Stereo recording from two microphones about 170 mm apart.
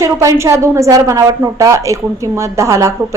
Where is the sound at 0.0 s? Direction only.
15° right (ahead or behind).